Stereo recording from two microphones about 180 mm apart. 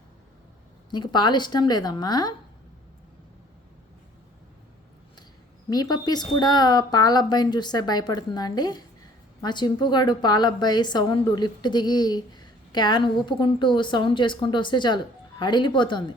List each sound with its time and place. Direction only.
0.9 s a woman's voice: 25° left (ahead or behind)
5.7 s a woman's voice: 20° left (ahead or behind)